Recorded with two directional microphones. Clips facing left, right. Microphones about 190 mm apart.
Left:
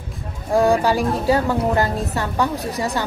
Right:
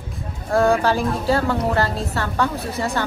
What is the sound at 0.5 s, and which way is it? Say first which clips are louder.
A woman's voice: left 1 dB; 15° left (ahead or behind).